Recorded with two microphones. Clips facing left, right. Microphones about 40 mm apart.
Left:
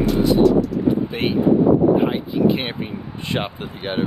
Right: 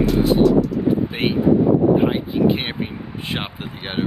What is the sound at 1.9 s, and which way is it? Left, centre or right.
Speech, centre.